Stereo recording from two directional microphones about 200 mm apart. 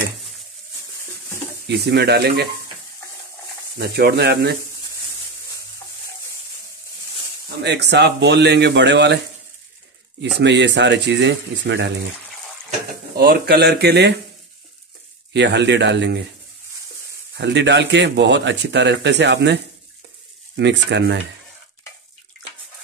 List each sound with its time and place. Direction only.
1.7 s speech: 55° right (ahead or behind)
3.7 s speech: 50° right (ahead or behind)
7.6 s speech: 60° right (ahead or behind)
10.3 s speech: 60° right (ahead or behind)
13.1 s speech: 50° right (ahead or behind)
15.3 s speech: 60° right (ahead or behind)
17.4 s speech: 60° right (ahead or behind)